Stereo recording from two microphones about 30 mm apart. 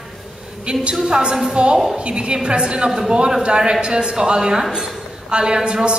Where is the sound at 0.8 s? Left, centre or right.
Right.